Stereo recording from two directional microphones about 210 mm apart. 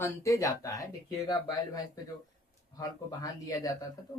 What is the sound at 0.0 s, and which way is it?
Speech, 15° left (ahead or behind).